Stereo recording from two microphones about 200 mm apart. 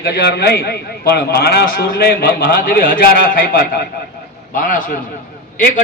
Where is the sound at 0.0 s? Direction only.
55° left (ahead or behind).